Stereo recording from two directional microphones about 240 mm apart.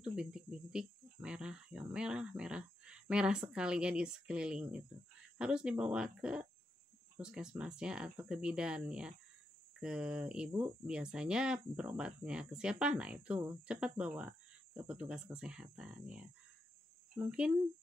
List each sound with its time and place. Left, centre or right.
0.0 s cricket: centre
5.4 s speech: centre